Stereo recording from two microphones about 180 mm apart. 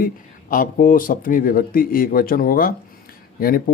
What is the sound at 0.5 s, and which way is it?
Speech, 50° left (ahead or behind).